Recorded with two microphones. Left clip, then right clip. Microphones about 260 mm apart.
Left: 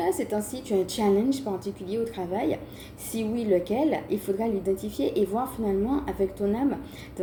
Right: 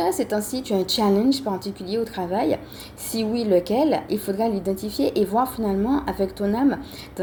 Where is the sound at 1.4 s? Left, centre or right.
Right.